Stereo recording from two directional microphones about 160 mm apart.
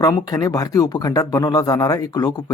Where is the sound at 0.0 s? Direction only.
20° left (ahead or behind).